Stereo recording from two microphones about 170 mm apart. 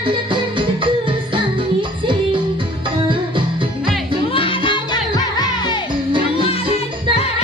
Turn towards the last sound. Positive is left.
turn(degrees=25)  # may be behind; listen again after turning